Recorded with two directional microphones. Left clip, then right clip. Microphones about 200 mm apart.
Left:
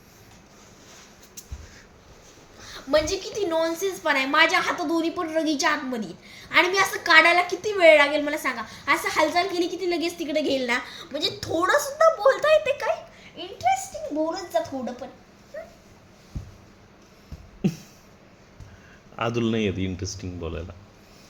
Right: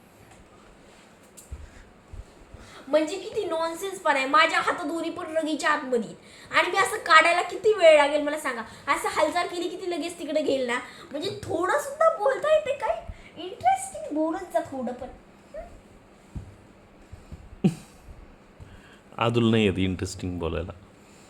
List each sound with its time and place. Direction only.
3.5 s a woman's voice: centre (ahead or behind); by 12.9 s 20° left (ahead or behind)
13.3 s a sound: 15° left (ahead or behind)
14.3 s a woman's voice: 15° left (ahead or behind)
15.5 s dog: 25° left (ahead or behind)
17.6 s music: 20° right (ahead or behind)
19.1 s speech: 20° right (ahead or behind)